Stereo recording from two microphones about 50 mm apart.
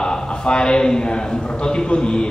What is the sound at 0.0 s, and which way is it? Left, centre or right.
A man's voice, centre.